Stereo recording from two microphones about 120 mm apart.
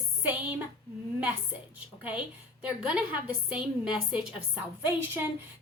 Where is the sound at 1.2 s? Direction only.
10° right (ahead or behind).